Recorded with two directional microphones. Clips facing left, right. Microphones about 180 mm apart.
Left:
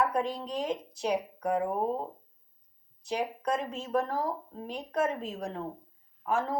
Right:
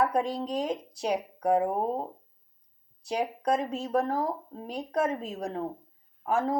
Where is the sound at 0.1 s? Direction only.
35° right (ahead or behind).